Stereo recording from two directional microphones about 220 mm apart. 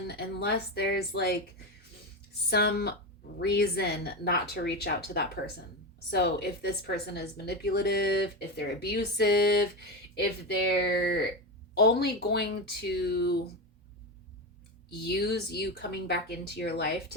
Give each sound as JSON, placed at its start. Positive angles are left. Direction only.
{"t": 0.1, "sound": "a woman's voice", "side_deg": 45}
{"t": 2.5, "sound": "a woman's voice", "side_deg": 45}
{"t": 10.8, "sound": "a woman's voice", "side_deg": 50}
{"t": 14.8, "sound": "a woman's voice", "side_deg": 45}